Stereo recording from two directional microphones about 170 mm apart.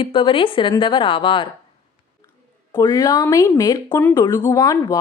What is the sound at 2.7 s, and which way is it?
Speech, 25° left (ahead or behind).